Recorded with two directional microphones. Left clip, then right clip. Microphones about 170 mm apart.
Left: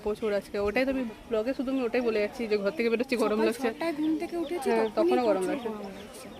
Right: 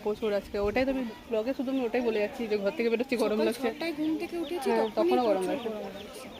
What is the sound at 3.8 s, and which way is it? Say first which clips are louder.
Speech: left 2 dB; 45° left (ahead or behind).